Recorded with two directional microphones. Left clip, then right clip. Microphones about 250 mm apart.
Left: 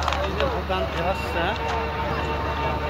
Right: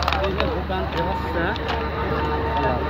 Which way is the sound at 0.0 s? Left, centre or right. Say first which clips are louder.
Right 2 dB; right.